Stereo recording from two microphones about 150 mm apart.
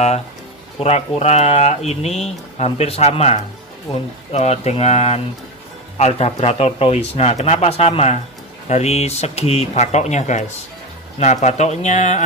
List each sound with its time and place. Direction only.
0.7 s speech: 45° left (ahead or behind)